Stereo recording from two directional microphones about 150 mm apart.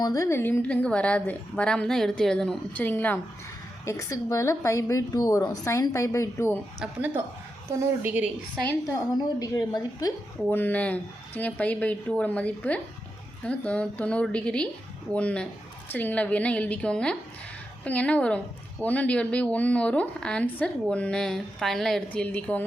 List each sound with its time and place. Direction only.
0.0 s a woman's voice: 20° left (ahead or behind)
8.0 s a woman's voice: 10° right (ahead or behind)
8.9 s a woman's voice: 20° left (ahead or behind)
10.5 s a woman's voice: 10° left (ahead or behind)